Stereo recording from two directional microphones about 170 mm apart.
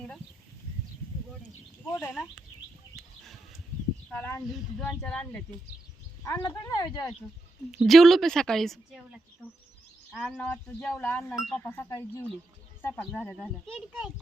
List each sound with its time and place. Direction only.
1.9 s speech: 10° left (ahead or behind)
4.1 s a woman's voice: 10° left (ahead or behind)
6.2 s speech: 20° left (ahead or behind)
7.7 s a woman's voice: centre (ahead or behind)
10.3 s speech: 10° left (ahead or behind)
11.3 s a woman's voice: centre (ahead or behind)
11.5 s a woman's voice: 15° left (ahead or behind); by 14.1 s 5° right (ahead or behind)